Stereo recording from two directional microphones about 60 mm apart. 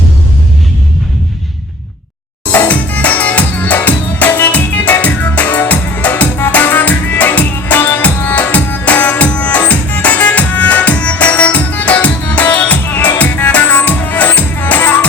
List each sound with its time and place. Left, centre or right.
2.5 s music: left